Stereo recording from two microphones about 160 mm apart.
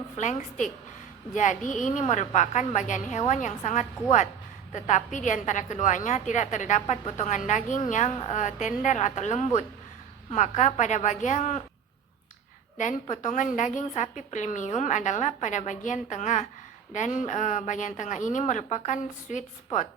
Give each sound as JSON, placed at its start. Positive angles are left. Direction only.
{"t": 0.2, "sound": "a woman's voice", "side_deg": 50}
{"t": 12.7, "sound": "a woman's voice", "side_deg": 50}